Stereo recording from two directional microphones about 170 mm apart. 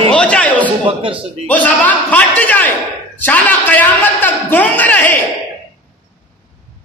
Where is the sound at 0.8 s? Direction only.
30° right (ahead or behind).